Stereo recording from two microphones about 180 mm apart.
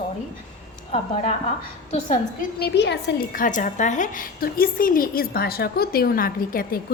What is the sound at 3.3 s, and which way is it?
A woman's voice, 45° left (ahead or behind).